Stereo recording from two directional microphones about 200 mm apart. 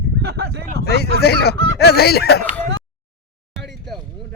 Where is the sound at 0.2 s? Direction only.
55° right (ahead or behind).